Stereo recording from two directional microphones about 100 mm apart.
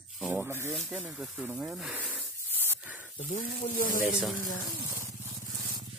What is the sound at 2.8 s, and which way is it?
Snake, 15° right (ahead or behind).